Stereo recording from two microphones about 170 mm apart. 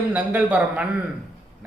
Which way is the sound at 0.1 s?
10° right (ahead or behind).